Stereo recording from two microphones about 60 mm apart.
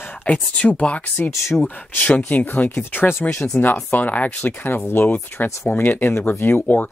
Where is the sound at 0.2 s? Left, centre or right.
Left.